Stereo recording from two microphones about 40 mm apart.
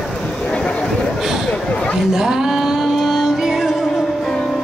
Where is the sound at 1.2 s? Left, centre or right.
Centre.